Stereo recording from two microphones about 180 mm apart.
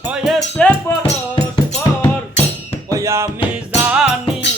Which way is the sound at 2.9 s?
15° right (ahead or behind).